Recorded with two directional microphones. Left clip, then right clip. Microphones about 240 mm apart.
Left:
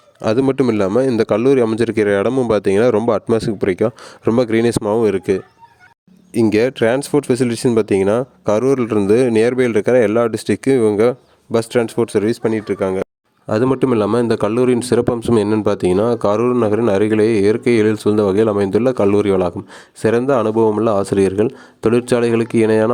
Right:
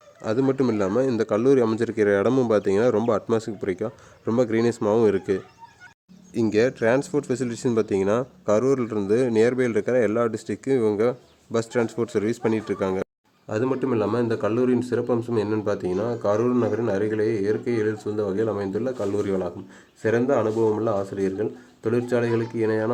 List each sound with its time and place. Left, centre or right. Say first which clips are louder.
0.2 s a man's voice: left 7 dB; left; by 13.1 s centre
13.5 s a man's voice: left 9 dB; left